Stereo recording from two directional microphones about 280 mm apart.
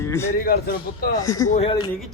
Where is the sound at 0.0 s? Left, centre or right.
Centre.